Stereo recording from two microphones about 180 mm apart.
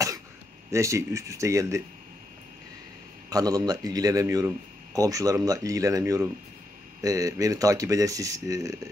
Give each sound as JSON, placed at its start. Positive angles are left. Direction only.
{"t": 0.7, "sound": "speech", "side_deg": -15}
{"t": 3.3, "sound": "speech", "side_deg": -20}